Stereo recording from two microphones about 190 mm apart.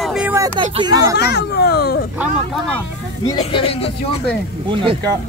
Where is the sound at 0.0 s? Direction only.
5° right (ahead or behind).